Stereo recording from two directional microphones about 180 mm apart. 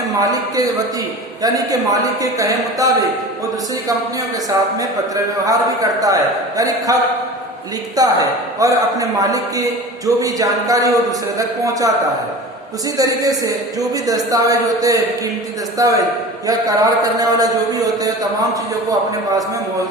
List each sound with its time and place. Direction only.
0.2 s a man's voice: 20° right (ahead or behind)
5.5 s a man's voice: 20° right (ahead or behind)
7.9 s a man's voice: 20° right (ahead or behind)
13.0 s a man's voice: 20° right (ahead or behind)